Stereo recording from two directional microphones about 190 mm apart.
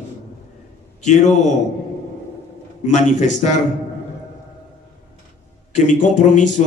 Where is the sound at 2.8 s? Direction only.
40° left (ahead or behind).